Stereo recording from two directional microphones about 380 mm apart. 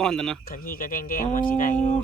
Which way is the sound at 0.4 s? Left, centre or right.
Left.